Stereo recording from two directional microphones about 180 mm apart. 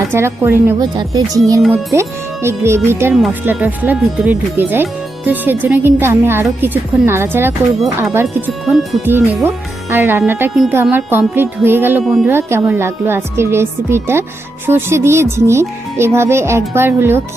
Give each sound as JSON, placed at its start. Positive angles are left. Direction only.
{"t": 0.1, "sound": "speech", "side_deg": -15}
{"t": 12.0, "sound": "speech", "side_deg": 0}
{"t": 12.3, "sound": "speech", "side_deg": -15}